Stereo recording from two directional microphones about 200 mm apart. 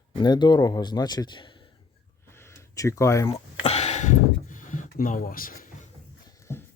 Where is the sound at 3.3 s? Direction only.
30° left (ahead or behind).